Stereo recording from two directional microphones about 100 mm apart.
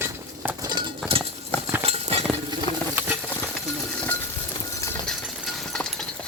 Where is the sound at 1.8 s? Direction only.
90° right.